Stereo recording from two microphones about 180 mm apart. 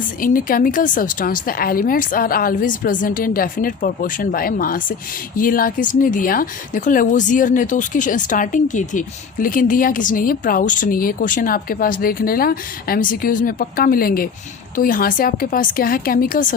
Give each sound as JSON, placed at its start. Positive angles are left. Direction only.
{"t": 0.2, "sound": "speech", "side_deg": 50}